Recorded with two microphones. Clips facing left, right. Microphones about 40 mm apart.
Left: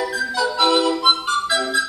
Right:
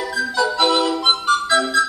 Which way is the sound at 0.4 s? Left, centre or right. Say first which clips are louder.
Even; centre.